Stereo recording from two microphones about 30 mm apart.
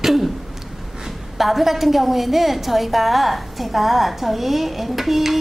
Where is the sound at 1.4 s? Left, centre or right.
Centre.